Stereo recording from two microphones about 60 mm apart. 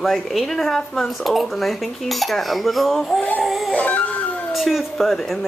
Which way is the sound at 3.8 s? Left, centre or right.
Left.